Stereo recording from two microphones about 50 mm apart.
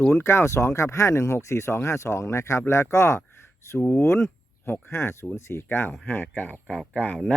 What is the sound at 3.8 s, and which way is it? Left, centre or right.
Speech, left.